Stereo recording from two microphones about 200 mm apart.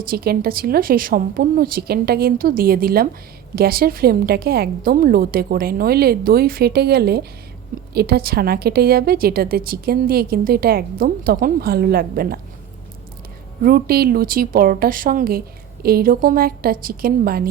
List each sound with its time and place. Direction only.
0.1 s a woman's voice: 50° right (ahead or behind)
13.6 s a woman's voice: 50° right (ahead or behind)